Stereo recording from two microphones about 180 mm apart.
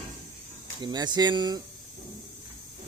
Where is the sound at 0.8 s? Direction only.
25° right (ahead or behind).